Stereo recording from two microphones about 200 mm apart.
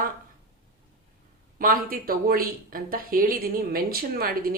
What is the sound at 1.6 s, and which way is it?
Speech, 45° right (ahead or behind).